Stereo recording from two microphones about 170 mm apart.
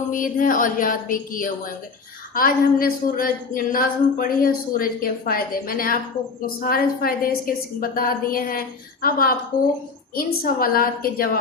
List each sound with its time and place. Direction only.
0.1 s a woman's voice: 50° left (ahead or behind)
9.5 s a woman's voice: 20° left (ahead or behind)
10.2 s a woman's voice: 60° left (ahead or behind)